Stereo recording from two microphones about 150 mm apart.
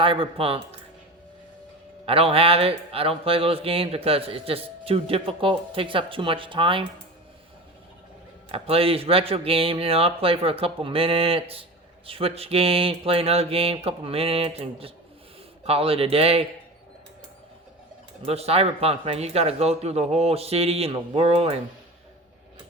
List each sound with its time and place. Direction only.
0.0 s speech: 35° right (ahead or behind)
2.0 s speech: 40° right (ahead or behind)
8.4 s speech: 40° right (ahead or behind)
18.3 s speech: 45° right (ahead or behind)